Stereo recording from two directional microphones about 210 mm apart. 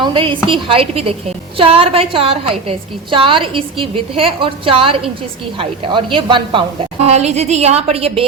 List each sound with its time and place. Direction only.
0.0 s a woman's voice: 25° right (ahead or behind)